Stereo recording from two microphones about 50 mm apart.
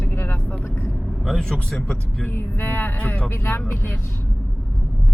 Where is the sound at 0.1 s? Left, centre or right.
Left.